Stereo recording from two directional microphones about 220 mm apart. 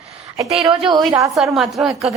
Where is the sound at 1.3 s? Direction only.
Centre (ahead or behind).